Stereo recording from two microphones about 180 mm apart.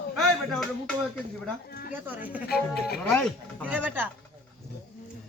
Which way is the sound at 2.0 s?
10° right (ahead or behind).